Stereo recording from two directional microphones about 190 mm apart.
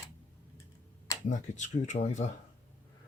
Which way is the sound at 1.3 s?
40° left (ahead or behind).